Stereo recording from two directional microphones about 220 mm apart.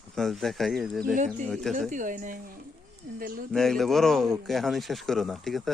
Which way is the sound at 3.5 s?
Centre (ahead or behind).